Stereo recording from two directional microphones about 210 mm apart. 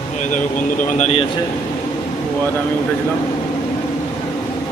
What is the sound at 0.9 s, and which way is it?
Speech, 30° left (ahead or behind).